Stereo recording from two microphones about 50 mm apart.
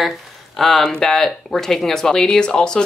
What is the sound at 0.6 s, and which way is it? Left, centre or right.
Speech, centre.